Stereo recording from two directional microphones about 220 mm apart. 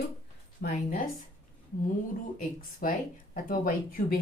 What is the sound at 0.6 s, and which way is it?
Speech, 35° left (ahead or behind).